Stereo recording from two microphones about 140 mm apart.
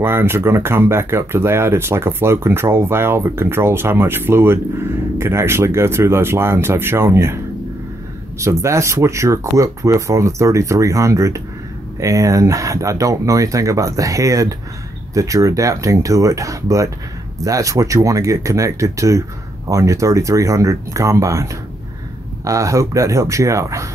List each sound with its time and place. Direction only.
0.0 s speech: 15° right (ahead or behind)
8.4 s speech: 20° right (ahead or behind)